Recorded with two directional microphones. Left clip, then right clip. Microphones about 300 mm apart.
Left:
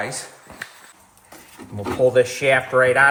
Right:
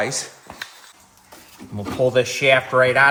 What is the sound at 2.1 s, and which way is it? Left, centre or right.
Speech, right.